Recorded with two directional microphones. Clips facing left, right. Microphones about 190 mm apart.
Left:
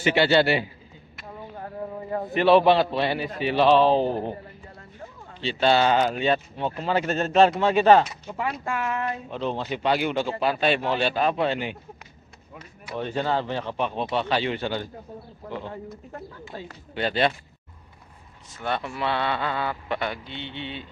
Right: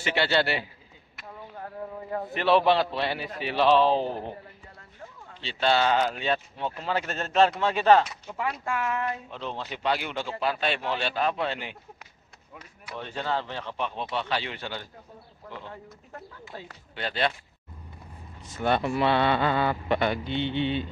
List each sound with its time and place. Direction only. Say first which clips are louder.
0.0 s speech: left 6 dB; 5° left (ahead or behind)
1.6 s a sound: left 3 dB; 10° left (ahead or behind)
2.3 s speech: left 4 dB; 5° left (ahead or behind)
5.4 s speech: left 4 dB; 5° left (ahead or behind)
12.9 s speech: left 5 dB; 10° left (ahead or behind)
14.1 s speech: left 8 dB; 20° left (ahead or behind)
16.5 s speech: left 4 dB; 10° right (ahead or behind)
18.6 s speech: right 4 dB; 5° right (ahead or behind)